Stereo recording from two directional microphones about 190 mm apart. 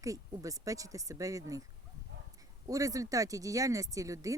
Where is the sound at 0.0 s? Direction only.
15° right (ahead or behind).